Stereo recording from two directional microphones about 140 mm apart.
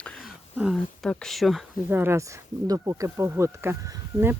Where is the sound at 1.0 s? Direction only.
5° left (ahead or behind).